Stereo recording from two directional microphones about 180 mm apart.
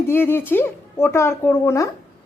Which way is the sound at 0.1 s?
10° left (ahead or behind).